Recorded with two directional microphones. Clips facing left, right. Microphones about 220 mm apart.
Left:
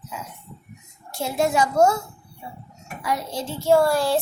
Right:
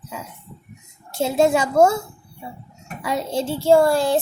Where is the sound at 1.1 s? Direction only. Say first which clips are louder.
Right 4 dB; 25° right (ahead or behind).